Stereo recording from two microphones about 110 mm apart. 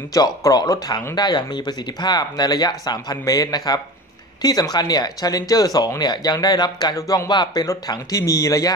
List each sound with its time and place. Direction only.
0.1 s speech: 35° left (ahead or behind)